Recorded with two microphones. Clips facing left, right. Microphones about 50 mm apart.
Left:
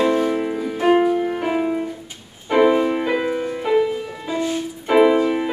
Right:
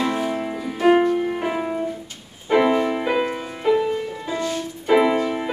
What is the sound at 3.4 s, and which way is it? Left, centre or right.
Music, centre.